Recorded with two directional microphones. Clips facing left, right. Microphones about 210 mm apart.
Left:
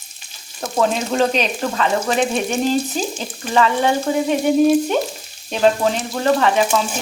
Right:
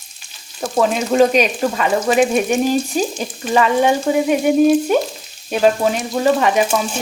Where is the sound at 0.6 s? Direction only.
5° right (ahead or behind).